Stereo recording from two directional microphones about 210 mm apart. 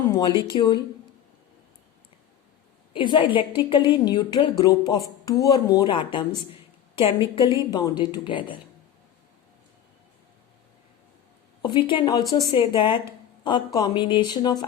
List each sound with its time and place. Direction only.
0.1 s a woman's voice: 20° left (ahead or behind)
2.9 s a woman's voice: 25° left (ahead or behind)
11.6 s a woman's voice: 20° left (ahead or behind)